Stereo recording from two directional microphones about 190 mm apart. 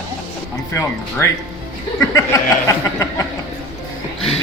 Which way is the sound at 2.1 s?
15° left (ahead or behind).